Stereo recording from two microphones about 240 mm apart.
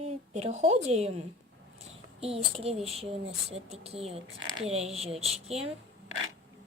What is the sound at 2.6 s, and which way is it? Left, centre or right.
A woman's voice, right.